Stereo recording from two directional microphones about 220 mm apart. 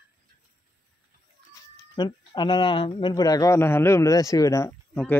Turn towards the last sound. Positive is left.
turn(degrees=15)  # may be behind; listen again after turning